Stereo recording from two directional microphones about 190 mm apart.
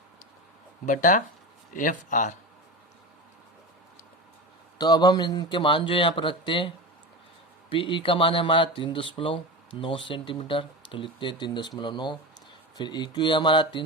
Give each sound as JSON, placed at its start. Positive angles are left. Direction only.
{"t": 0.9, "sound": "speech", "side_deg": 40}
{"t": 4.8, "sound": "speech", "side_deg": 20}